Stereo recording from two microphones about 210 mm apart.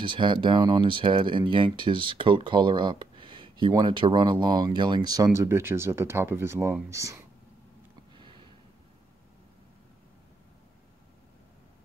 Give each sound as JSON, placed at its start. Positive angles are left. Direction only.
{"t": 0.0, "sound": "speech", "side_deg": -25}